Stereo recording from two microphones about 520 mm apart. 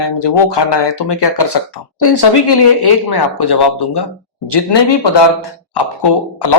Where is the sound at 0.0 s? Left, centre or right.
Left.